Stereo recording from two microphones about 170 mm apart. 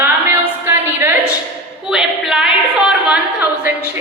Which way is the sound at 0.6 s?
15° right (ahead or behind).